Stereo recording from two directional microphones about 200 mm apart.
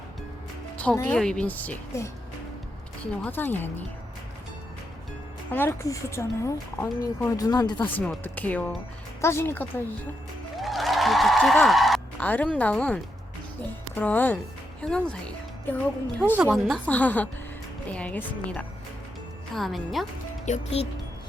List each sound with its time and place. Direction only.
0.8 s speech: 5° left (ahead or behind)
3.2 s speech: 10° left (ahead or behind)
5.5 s speech: 10° left (ahead or behind)
7.9 s speech: 10° left (ahead or behind)
10.6 s a sound: centre (ahead or behind)
13.9 s speech: 10° left (ahead or behind)
16.3 s speech: centre (ahead or behind)
20.4 s speech: 35° left (ahead or behind)